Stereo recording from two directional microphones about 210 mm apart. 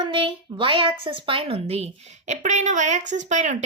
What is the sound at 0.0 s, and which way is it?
Speech, 25° right (ahead or behind).